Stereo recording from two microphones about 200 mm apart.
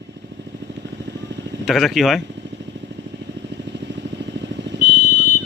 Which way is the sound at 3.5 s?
60° right (ahead or behind).